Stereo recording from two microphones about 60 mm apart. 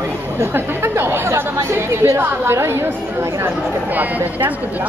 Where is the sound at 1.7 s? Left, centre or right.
Right.